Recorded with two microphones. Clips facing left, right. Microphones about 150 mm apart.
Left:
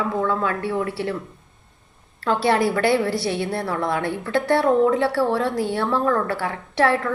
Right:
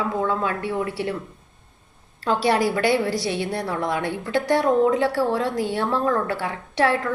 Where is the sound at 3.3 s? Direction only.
25° right (ahead or behind).